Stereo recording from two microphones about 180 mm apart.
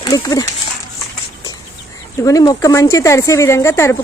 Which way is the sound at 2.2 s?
20° left (ahead or behind).